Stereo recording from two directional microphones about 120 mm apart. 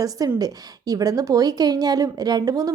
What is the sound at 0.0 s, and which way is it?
A woman's voice, 30° right (ahead or behind).